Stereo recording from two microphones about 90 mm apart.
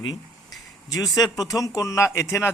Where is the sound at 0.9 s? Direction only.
45° left (ahead or behind).